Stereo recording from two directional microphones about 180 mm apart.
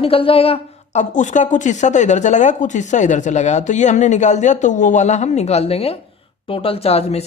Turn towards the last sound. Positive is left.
turn(degrees=35)  # may be behind; listen again after turning